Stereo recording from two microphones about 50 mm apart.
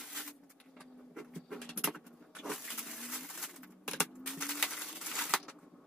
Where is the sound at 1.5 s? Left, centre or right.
Centre.